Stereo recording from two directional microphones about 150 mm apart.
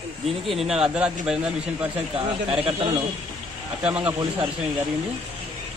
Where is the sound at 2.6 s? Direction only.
40° right (ahead or behind).